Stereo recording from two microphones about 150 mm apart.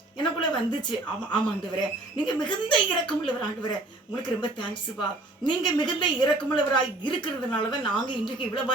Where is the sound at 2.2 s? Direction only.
30° left (ahead or behind).